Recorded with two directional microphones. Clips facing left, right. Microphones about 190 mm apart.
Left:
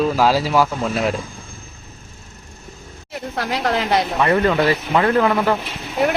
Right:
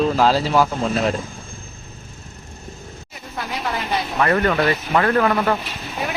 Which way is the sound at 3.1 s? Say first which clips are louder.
Left 6 dB; 75° left (ahead or behind).